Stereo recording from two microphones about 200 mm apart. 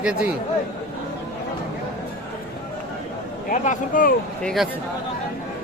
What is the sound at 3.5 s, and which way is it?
Speech, 40° left (ahead or behind).